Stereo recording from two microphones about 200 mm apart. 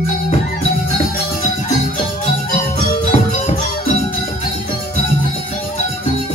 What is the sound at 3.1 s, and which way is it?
Music, 40° left (ahead or behind).